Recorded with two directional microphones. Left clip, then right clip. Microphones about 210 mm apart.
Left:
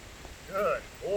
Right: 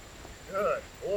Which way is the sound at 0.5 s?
15° left (ahead or behind).